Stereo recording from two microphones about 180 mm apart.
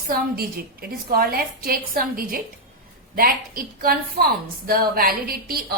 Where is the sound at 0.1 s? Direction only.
55° right (ahead or behind).